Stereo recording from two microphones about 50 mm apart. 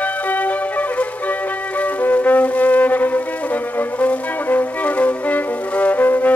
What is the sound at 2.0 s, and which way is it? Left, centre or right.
Music, left.